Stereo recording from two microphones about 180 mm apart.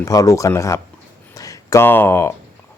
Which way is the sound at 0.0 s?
20° left (ahead or behind).